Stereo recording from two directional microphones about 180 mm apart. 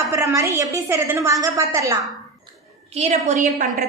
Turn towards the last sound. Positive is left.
turn(degrees=-45)  # may be behind; listen again after turning